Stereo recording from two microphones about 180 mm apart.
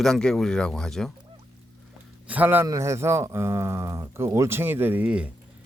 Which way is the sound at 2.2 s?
10° right (ahead or behind).